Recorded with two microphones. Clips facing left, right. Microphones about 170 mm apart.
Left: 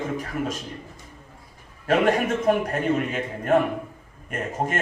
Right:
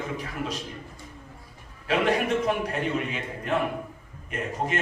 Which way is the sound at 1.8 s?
45° left (ahead or behind).